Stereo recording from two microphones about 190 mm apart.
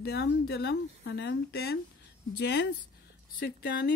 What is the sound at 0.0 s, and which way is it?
Speech, 60° left (ahead or behind).